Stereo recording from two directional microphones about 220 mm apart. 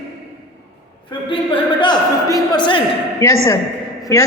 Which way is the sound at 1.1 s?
25° left (ahead or behind).